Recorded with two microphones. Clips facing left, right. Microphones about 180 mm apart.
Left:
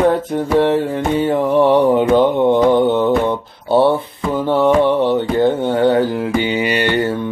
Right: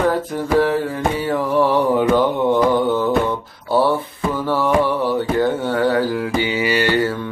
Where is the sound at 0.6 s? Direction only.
25° left (ahead or behind).